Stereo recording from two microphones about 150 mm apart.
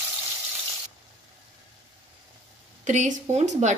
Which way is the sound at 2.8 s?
55° right (ahead or behind).